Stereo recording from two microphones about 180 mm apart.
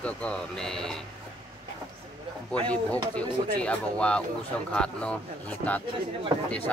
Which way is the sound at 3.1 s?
5° left (ahead or behind).